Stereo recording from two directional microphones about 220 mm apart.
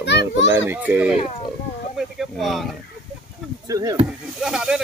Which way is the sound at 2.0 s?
Centre (ahead or behind).